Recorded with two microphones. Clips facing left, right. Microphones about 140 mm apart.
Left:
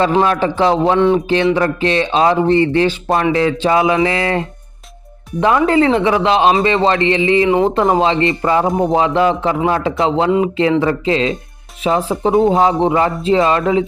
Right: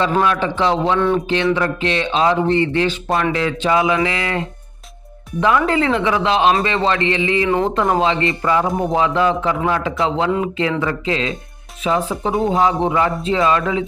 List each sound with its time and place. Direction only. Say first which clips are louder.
0.2 s speech: left 3 dB; 40° left (ahead or behind)
1.5 s a man's voice: left 4 dB; 35° left (ahead or behind)